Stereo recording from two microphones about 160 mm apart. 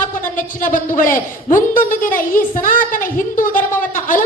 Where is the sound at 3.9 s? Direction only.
55° left (ahead or behind).